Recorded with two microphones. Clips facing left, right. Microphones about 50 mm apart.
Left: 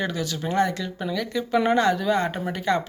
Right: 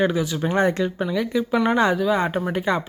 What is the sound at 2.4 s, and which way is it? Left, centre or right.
Speech, centre.